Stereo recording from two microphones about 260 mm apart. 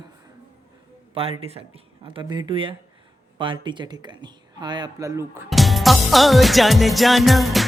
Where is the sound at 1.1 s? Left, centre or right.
Right.